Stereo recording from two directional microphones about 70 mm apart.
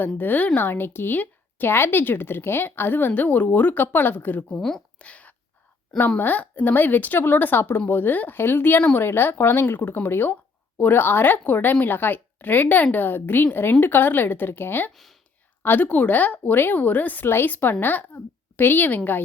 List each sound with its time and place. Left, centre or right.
0.2 s a woman's voice: left
4.4 s speech: centre
4.9 s a sound: centre
6.1 s a woman's voice: left